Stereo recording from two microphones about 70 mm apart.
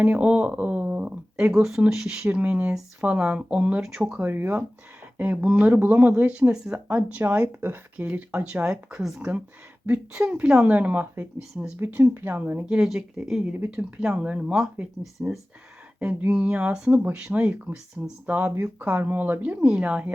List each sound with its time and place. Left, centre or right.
0.0 s speech: centre
4.2 s speech: right
7.4 s speech: right
7.9 s speech: centre
8.6 s speech: centre
10.7 s speech: right
12.6 s speech: centre
15.2 s speech: right